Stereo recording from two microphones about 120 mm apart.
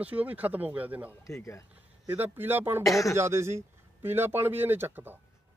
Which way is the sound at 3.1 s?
20° right (ahead or behind).